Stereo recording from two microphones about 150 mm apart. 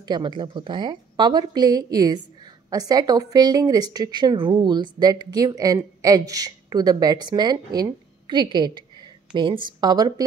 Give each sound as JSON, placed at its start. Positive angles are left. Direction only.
{"t": 0.0, "sound": "speech", "side_deg": -30}